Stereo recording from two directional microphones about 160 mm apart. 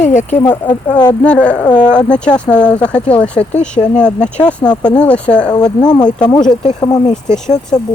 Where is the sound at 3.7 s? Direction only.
5° left (ahead or behind).